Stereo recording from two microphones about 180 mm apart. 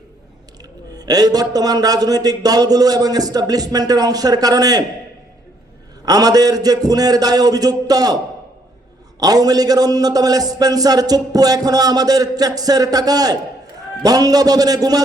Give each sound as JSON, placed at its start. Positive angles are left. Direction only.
{"t": 0.9, "sound": "a man's voice", "side_deg": -20}
{"t": 6.1, "sound": "a man's voice", "side_deg": -20}
{"t": 9.2, "sound": "a man's voice", "side_deg": -20}